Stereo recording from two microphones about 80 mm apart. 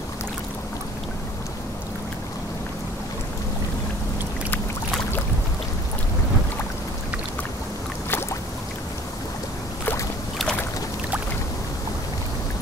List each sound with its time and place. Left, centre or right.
8.1 s boat: left